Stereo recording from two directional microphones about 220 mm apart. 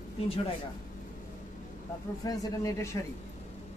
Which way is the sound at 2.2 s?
15° left (ahead or behind).